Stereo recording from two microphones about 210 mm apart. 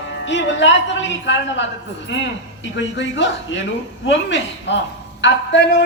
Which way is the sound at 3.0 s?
60° left (ahead or behind).